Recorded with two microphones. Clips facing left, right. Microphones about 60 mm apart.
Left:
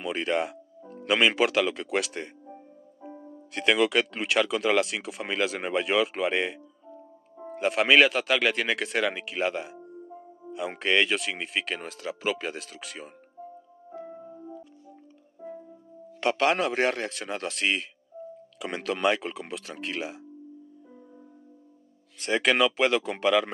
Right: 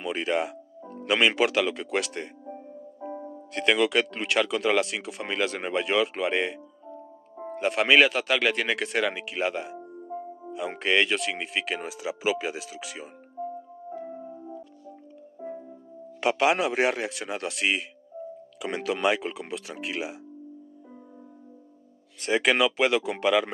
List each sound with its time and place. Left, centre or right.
0.0 s speech: centre
3.1 s music: right
3.5 s speech: centre
10.0 s music: right
10.5 s speech: centre
13.4 s music: right
13.8 s music: centre
16.2 s speech: centre
22.2 s speech: centre